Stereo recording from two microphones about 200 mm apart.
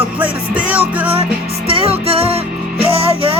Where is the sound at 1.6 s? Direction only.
30° right (ahead or behind).